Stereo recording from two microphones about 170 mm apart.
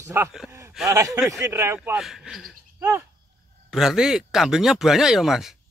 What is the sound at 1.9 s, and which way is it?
Speech, 5° right (ahead or behind).